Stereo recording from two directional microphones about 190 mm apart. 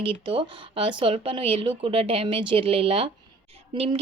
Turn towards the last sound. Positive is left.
turn(degrees=-30)  # may be behind; listen again after turning